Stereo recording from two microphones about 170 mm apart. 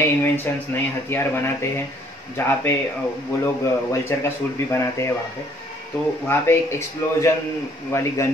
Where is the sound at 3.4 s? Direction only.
15° left (ahead or behind).